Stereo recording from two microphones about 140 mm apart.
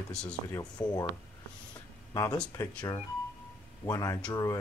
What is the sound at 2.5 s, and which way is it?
Speech, 25° left (ahead or behind).